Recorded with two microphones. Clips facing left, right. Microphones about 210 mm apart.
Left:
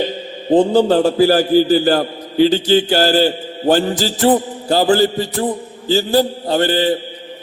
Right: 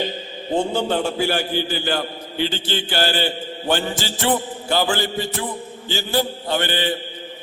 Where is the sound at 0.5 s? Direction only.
35° left (ahead or behind).